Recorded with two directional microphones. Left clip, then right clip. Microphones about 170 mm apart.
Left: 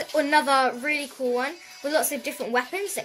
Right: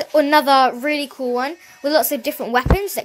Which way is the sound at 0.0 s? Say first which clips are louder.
Right 7 dB; 40° right (ahead or behind).